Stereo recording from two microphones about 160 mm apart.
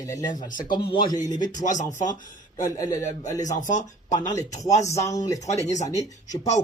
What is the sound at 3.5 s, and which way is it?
Speech, 50° left (ahead or behind).